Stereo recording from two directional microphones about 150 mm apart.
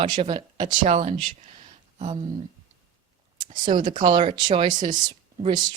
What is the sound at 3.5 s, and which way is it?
Speech, 60° right (ahead or behind).